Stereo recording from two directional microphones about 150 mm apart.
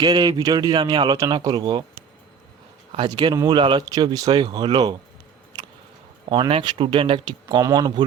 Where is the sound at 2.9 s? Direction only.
30° right (ahead or behind).